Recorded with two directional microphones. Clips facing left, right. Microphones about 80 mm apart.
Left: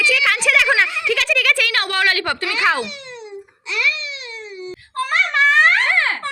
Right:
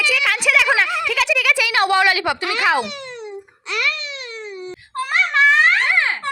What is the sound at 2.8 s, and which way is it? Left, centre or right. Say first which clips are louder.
Babbling: right 2 dB; right.